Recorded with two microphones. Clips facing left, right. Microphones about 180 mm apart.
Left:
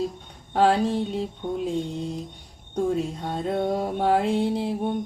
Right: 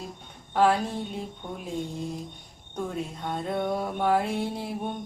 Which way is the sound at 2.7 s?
30° left (ahead or behind).